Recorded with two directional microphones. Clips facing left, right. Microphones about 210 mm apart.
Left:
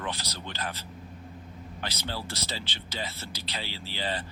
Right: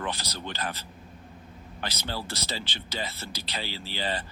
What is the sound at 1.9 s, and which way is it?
Speech, 45° right (ahead or behind).